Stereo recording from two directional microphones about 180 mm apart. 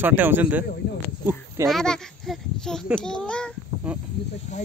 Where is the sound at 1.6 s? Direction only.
Centre (ahead or behind).